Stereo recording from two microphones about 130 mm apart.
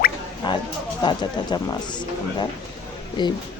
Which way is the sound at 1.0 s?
35° left (ahead or behind).